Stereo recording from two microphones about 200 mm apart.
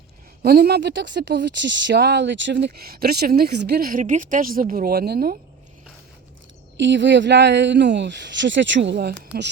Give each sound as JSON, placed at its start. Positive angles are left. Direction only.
{"t": 0.4, "sound": "speech", "side_deg": -50}
{"t": 6.7, "sound": "speech", "side_deg": -65}